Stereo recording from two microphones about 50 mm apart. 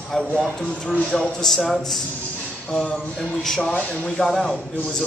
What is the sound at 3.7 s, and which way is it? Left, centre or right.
Speech, left.